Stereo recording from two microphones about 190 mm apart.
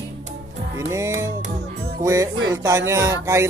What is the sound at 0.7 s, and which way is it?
Music, 15° right (ahead or behind).